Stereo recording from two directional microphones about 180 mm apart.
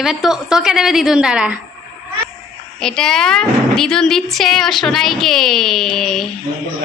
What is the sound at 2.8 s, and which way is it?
A woman's voice, 5° left (ahead or behind).